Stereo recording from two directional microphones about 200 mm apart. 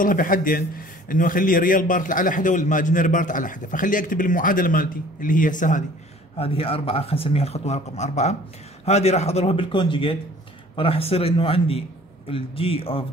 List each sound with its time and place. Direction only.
0.0 s a man's voice: 45° left (ahead or behind)
6.3 s speech: 30° left (ahead or behind)